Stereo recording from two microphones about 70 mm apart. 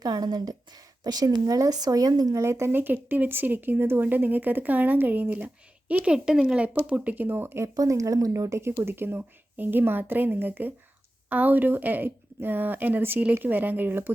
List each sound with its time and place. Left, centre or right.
0.0 s a woman's voice: right
2.4 s speech: right
6.1 s speech: centre; by 7.7 s right
7.8 s speech: right
8.8 s speech: right